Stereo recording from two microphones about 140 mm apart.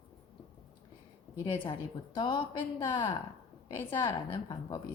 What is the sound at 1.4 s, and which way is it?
A woman's voice, 35° left (ahead or behind).